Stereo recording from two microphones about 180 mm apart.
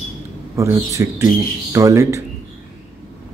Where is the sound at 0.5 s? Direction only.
15° right (ahead or behind).